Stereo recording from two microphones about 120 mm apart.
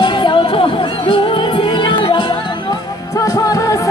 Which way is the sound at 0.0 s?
40° left (ahead or behind).